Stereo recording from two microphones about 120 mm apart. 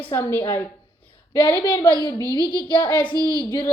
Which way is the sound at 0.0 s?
15° left (ahead or behind).